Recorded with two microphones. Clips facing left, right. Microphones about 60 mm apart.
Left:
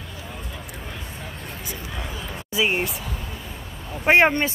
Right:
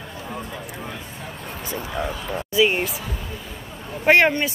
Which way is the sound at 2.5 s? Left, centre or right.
Left.